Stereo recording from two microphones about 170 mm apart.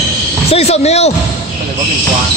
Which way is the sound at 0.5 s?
40° left (ahead or behind).